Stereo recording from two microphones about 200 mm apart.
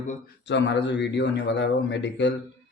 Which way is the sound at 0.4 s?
60° left (ahead or behind).